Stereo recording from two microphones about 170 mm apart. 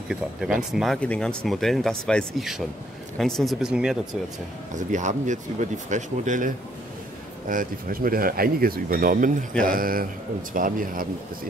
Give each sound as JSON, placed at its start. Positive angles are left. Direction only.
{"t": 0.1, "sound": "speech", "side_deg": -5}
{"t": 4.7, "sound": "speech", "side_deg": -45}